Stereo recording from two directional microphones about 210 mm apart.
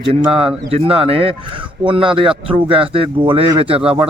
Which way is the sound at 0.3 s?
25° right (ahead or behind).